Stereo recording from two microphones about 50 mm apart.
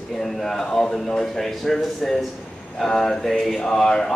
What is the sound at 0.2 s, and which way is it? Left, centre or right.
A man's voice, centre.